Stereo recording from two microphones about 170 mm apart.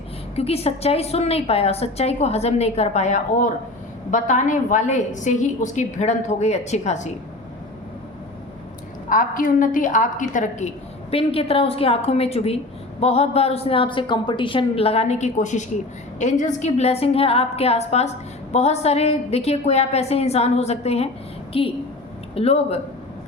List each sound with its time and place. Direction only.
0.3 s a woman's voice: 35° left (ahead or behind)
9.0 s a woman's voice: 50° left (ahead or behind)
11.1 s a woman's voice: 35° left (ahead or behind)